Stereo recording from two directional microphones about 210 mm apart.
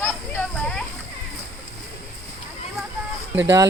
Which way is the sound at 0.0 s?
5° left (ahead or behind).